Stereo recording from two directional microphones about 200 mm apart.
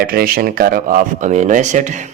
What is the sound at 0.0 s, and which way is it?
Speech, 50° right (ahead or behind).